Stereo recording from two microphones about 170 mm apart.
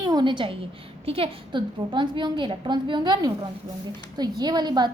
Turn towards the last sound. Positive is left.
turn(degrees=-25)  # may be behind; listen again after turning